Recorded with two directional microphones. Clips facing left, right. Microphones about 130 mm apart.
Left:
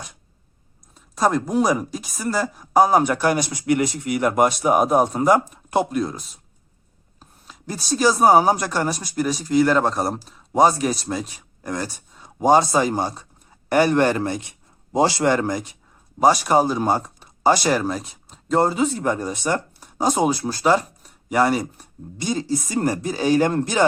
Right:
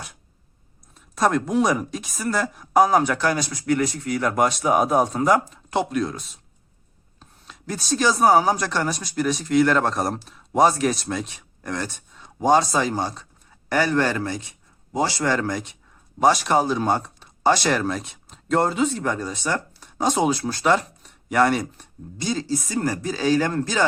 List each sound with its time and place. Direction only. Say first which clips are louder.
0.9 s speech: left 1 dB; centre (ahead or behind)
7.2 s a sound: even; 5° left (ahead or behind)
8.3 s a man's voice: left 2 dB; 20° left (ahead or behind)
16.2 s speech: left 2 dB; 5° left (ahead or behind)
20.0 s speech: left 1 dB; 5° left (ahead or behind)
20.7 s a sound: left 2 dB; 5° left (ahead or behind)
22.3 s speech: left 2 dB; 20° left (ahead or behind)